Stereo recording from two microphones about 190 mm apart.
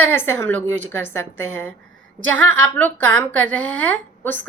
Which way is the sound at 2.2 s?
90° right.